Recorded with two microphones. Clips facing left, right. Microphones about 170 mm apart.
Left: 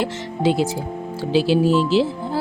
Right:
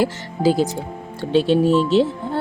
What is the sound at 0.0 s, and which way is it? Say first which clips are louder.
Speech: right 2 dB; centre (ahead or behind).